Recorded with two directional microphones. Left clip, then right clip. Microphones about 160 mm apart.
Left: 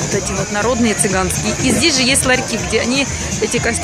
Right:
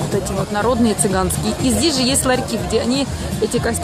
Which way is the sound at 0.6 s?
5° right (ahead or behind).